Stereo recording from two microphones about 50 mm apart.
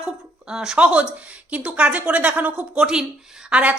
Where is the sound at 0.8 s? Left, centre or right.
Right.